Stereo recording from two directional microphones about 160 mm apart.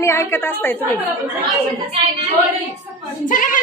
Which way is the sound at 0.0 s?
15° left (ahead or behind).